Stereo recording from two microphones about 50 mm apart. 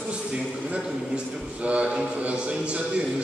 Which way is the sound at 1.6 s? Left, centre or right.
Right.